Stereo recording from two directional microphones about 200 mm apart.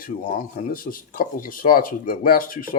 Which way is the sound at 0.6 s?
45° left (ahead or behind).